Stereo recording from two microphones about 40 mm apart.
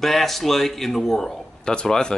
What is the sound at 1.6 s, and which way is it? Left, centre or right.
Speech, left.